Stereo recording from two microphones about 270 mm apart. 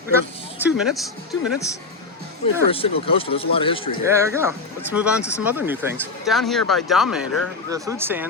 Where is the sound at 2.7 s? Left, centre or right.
Left.